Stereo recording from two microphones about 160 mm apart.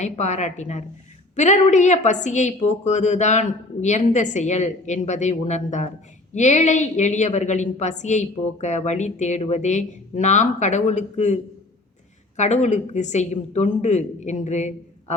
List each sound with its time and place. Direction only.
0.0 s a woman's voice: 45° left (ahead or behind)
12.4 s a woman's voice: 45° left (ahead or behind)